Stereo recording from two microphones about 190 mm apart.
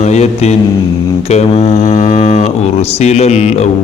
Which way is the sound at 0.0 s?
35° left (ahead or behind).